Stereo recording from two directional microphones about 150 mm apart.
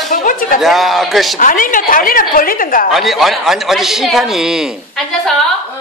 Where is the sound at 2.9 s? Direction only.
Centre (ahead or behind).